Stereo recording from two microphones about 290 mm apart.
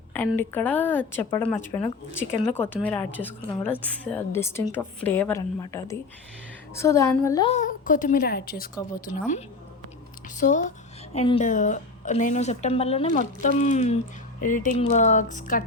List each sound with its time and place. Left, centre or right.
0.1 s a woman's voice: centre; by 8.7 s left
10.2 s a woman's voice: left